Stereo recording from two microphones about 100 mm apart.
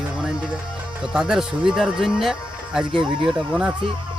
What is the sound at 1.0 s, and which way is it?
Speech, 10° right (ahead or behind).